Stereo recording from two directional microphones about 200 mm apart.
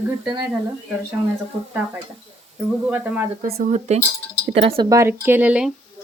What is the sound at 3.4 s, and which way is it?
Speech, 35° right (ahead or behind).